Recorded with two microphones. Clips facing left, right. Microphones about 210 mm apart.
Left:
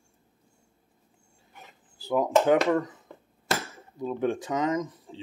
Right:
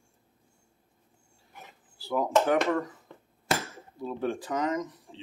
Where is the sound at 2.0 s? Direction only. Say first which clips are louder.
Left 3 dB; 20° left (ahead or behind).